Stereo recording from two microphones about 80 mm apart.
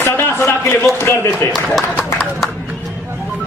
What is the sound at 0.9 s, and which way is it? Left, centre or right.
Speech, left.